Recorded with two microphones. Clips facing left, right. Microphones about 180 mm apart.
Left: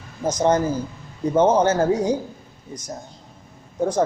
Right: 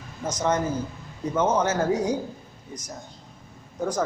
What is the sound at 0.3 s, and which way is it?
A man's voice, 30° left (ahead or behind).